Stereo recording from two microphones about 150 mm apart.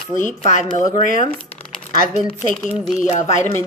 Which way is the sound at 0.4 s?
55° left (ahead or behind).